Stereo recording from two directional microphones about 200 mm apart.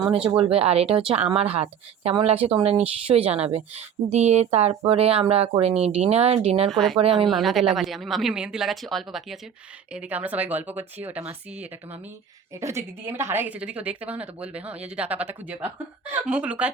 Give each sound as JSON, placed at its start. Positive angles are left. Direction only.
{"t": 0.3, "sound": "a woman's voice", "side_deg": -30}
{"t": 6.7, "sound": "speech", "side_deg": 0}